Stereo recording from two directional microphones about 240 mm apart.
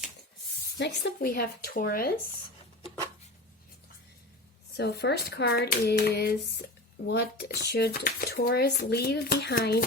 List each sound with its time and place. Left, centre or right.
0.8 s speech: left
4.8 s speech: left